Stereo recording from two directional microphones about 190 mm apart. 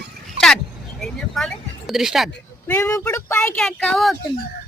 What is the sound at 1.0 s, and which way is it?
Speech, centre (ahead or behind).